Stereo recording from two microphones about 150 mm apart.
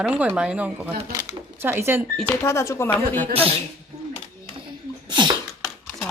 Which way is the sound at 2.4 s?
20° left (ahead or behind).